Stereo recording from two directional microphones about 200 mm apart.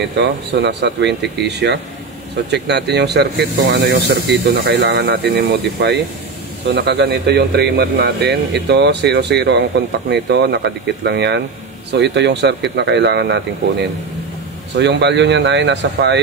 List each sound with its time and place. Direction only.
0.2 s speech: 60° right (ahead or behind)